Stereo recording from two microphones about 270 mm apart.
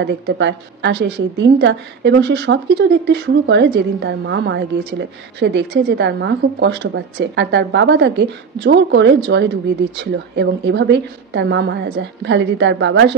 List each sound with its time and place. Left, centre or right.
0.0 s a woman's voice: right